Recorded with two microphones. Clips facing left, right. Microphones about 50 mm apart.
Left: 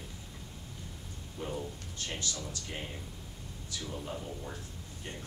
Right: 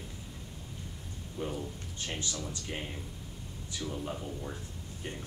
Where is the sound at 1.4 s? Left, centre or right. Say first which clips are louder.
Right 3 dB; centre.